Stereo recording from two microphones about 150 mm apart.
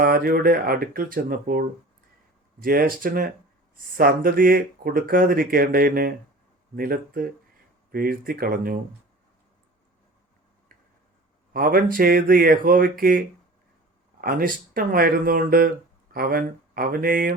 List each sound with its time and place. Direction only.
0.0 s speech: 75° right (ahead or behind)
11.5 s speech: 75° right (ahead or behind)